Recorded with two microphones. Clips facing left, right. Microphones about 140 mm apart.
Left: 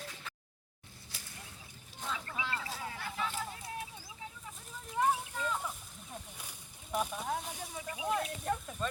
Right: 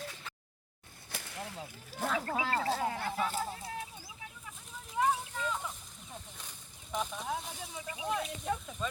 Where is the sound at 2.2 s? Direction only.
45° right (ahead or behind).